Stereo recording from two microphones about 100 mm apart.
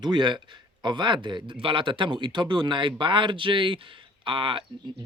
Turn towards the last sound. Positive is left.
turn(degrees=-60)  # may be behind; listen again after turning